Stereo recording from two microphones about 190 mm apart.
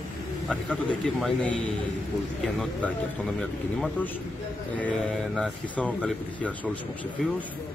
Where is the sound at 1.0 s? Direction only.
5° left (ahead or behind).